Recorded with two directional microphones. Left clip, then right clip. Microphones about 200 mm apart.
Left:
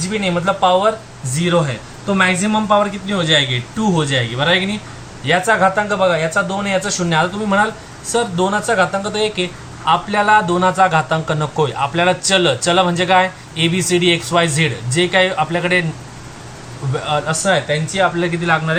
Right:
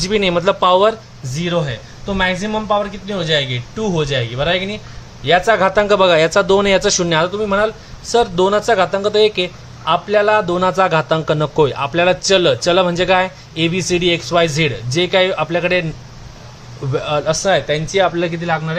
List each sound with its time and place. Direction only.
0.0 s a man's voice: 50° right (ahead or behind)
1.4 s a man's voice: 40° right (ahead or behind)
16.9 s a man's voice: 40° right (ahead or behind)
18.4 s speech: 30° right (ahead or behind)